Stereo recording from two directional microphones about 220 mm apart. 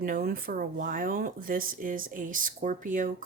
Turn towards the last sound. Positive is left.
turn(degrees=-35)  # may be behind; listen again after turning